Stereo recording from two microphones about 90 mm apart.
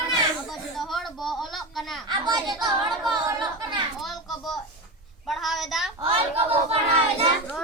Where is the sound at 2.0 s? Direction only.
45° right (ahead or behind).